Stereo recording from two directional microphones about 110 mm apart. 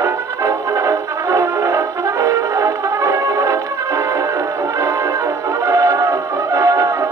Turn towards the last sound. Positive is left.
turn(degrees=-30)  # may be behind; listen again after turning